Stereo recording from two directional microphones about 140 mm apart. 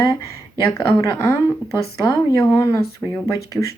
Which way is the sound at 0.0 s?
20° left (ahead or behind).